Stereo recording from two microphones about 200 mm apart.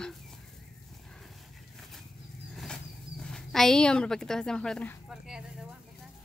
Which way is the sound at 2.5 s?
5° left (ahead or behind).